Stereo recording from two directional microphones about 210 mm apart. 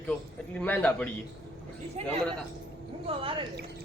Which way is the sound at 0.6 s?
10° left (ahead or behind).